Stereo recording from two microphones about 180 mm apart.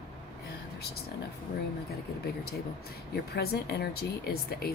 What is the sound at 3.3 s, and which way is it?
Speech, 65° left (ahead or behind).